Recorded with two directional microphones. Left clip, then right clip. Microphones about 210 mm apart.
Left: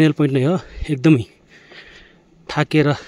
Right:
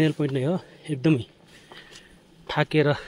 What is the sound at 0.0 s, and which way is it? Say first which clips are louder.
Speech: left 8 dB; 50° left (ahead or behind).